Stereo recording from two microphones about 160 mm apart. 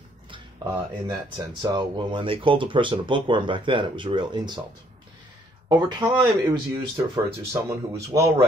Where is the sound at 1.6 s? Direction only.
30° right (ahead or behind).